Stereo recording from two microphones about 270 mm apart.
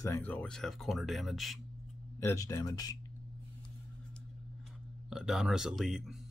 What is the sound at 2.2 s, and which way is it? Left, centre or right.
Speech, centre.